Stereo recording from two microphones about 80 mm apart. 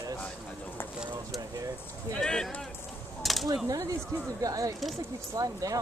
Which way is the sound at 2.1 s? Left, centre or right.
Centre.